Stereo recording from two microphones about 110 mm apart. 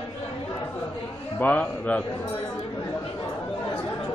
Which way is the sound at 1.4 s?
15° left (ahead or behind).